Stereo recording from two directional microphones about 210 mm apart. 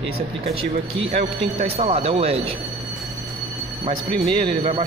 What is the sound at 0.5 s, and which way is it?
Speech, 30° right (ahead or behind).